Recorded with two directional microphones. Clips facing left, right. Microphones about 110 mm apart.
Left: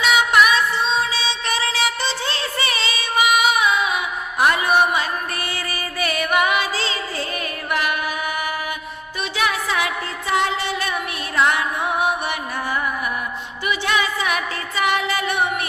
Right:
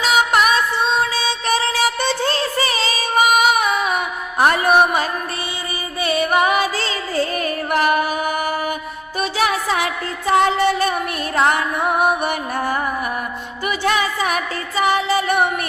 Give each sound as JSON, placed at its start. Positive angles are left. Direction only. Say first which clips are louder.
{"t": 0.0, "sound": "music", "louder": "even", "side_deg": -40}
{"t": 6.0, "sound": "music", "louder": "right 3 dB", "side_deg": -30}